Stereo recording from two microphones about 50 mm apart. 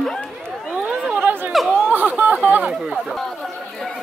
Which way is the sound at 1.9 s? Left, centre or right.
Right.